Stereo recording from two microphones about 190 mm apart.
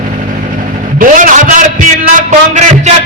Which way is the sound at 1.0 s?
45° right (ahead or behind).